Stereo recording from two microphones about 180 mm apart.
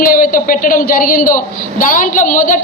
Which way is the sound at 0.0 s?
50° left (ahead or behind).